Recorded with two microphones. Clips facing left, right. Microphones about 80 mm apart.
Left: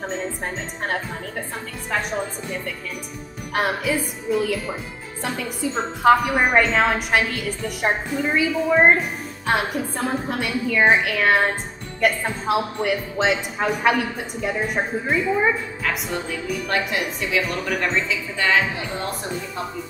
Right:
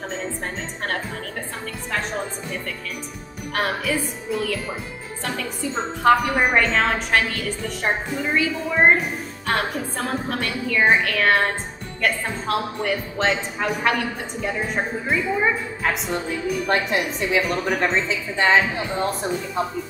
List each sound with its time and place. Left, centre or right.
3.5 s speech: centre
6.0 s speech: centre
16.6 s a woman's voice: right